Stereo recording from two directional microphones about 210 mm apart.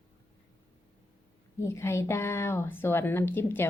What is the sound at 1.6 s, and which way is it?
A woman's voice, 15° left (ahead or behind).